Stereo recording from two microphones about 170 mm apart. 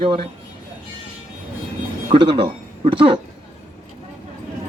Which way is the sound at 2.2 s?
30° right (ahead or behind).